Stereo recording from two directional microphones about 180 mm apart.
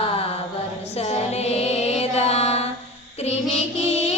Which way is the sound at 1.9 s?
35° left (ahead or behind).